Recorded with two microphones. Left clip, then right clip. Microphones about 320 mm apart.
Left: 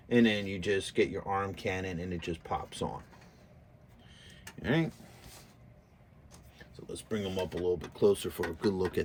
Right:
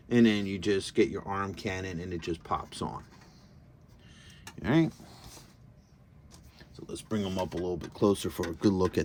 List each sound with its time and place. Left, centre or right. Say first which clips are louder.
0.1 s speech: right 1 dB; centre
4.2 s a sound: right 2 dB; centre
6.8 s speech: right 1 dB; centre